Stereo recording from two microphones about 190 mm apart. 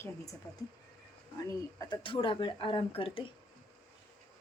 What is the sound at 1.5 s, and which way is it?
Speech, 20° left (ahead or behind).